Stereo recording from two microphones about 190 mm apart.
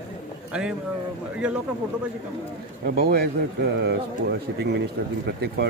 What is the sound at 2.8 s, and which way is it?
A man's voice, 55° right (ahead or behind).